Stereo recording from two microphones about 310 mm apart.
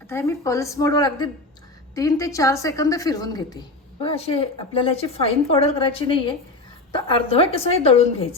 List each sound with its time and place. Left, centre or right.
0.1 s a woman's voice: centre